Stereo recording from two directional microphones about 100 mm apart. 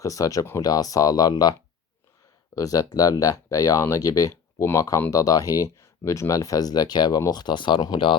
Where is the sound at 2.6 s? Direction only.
35° left (ahead or behind).